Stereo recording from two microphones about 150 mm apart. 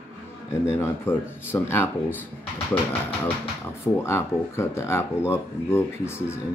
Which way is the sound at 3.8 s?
20° left (ahead or behind).